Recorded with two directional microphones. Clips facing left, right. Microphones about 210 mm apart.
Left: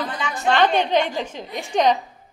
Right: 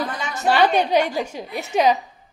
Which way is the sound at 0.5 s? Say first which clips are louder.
Right 1 dB; 10° right (ahead or behind).